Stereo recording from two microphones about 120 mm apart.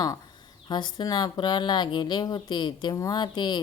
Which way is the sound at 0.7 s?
35° left (ahead or behind).